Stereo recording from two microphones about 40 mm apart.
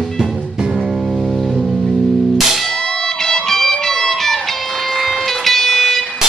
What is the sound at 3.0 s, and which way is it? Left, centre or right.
Music, centre.